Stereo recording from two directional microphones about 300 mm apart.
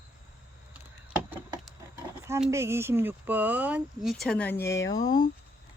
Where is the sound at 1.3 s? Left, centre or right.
Centre.